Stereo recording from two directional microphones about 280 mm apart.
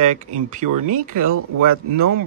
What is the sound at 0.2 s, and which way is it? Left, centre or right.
Speech, right.